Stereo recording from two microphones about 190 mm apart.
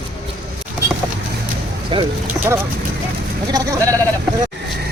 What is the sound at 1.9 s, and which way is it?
Speech, 25° right (ahead or behind).